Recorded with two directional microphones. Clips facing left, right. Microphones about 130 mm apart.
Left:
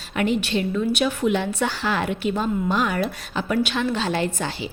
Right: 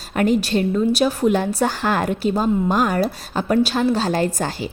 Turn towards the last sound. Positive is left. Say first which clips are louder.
# right 4 dB
turn(degrees=-40)  # may be behind; listen again after turning